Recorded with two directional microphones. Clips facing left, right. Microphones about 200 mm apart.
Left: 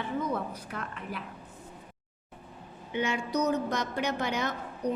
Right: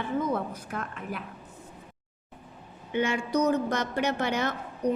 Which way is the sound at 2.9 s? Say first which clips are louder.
Right 3 dB; 55° right (ahead or behind).